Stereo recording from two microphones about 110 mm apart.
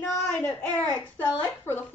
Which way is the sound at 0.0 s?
10° left (ahead or behind).